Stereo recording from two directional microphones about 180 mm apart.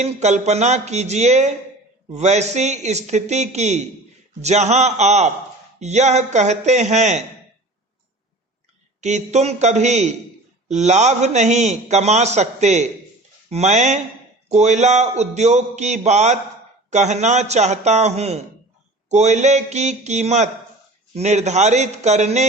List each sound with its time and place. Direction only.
0.0 s a man's voice: 40° right (ahead or behind)
9.0 s a man's voice: 40° right (ahead or behind)